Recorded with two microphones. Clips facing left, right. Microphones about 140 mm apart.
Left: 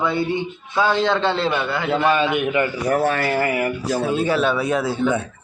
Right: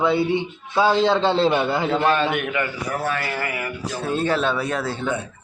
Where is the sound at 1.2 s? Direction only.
35° right (ahead or behind).